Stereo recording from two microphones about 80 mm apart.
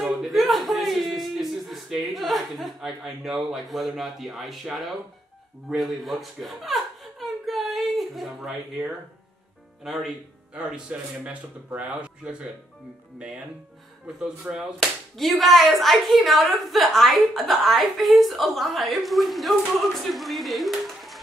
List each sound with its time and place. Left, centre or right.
0.0 s speech: centre
5.7 s speech: centre
10.6 s speech: centre
14.0 s speech: centre
14.8 s speech: centre